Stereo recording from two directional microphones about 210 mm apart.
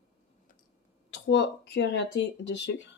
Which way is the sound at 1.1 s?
55° left (ahead or behind).